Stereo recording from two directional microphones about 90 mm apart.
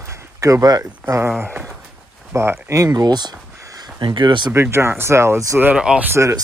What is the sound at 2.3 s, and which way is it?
Speech, 30° right (ahead or behind).